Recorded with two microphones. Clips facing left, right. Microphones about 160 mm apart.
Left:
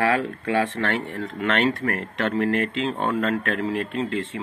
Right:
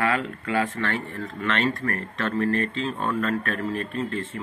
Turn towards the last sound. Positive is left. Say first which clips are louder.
# left 3 dB
turn(degrees=90)